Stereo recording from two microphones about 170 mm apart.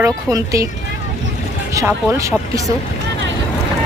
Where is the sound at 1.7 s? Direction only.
15° right (ahead or behind).